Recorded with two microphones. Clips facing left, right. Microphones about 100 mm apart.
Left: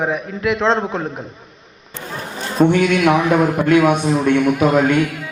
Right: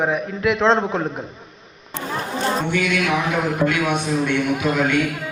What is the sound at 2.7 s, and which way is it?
A man's voice, 45° left (ahead or behind).